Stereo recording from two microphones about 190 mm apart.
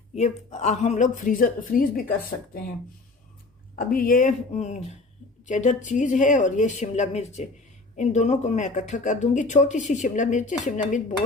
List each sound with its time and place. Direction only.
0.2 s speech: 35° left (ahead or behind)
3.8 s speech: 50° left (ahead or behind)